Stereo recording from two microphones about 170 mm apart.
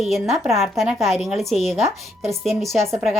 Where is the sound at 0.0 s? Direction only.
Centre (ahead or behind).